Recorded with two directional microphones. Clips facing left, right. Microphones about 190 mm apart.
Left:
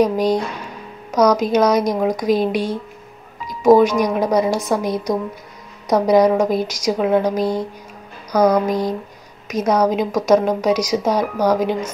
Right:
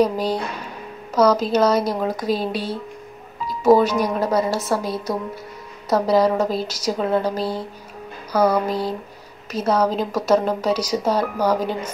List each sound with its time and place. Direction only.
0.0 s speech: 15° left (ahead or behind)
3.4 s music: 15° left (ahead or behind)
4.0 s speech: 15° left (ahead or behind)